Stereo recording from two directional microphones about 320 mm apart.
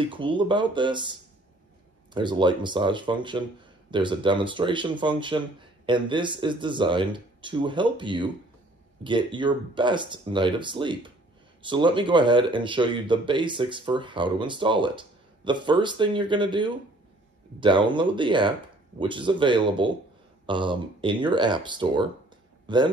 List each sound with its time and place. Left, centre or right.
0.0 s speech: centre
2.1 s speech: centre